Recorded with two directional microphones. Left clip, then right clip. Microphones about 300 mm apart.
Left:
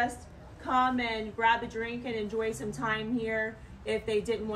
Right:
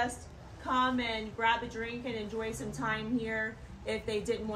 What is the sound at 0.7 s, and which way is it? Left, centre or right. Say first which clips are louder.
A woman's voice: left 3 dB; left.